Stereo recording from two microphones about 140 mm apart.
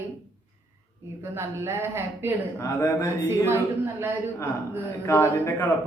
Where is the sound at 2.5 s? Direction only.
20° left (ahead or behind).